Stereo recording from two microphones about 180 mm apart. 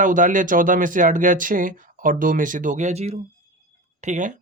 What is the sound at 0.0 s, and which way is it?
Speech, 45° right (ahead or behind).